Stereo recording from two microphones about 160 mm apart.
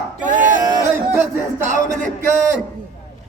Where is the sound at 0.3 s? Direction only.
55° right (ahead or behind).